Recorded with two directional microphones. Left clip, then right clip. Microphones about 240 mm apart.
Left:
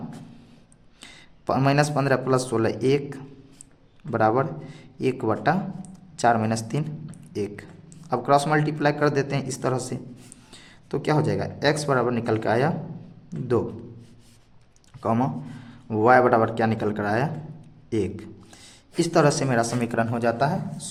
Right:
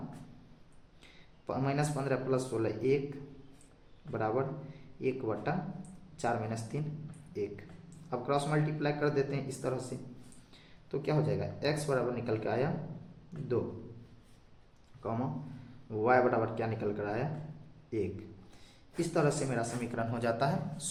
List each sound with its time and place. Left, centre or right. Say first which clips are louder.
1.0 s a man's voice: left 13 dB; left
10.9 s a man's voice: left 9 dB; left
15.0 s a man's voice: left 12 dB; left